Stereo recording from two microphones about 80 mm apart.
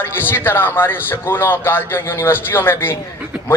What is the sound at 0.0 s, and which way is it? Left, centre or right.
A man's voice, left.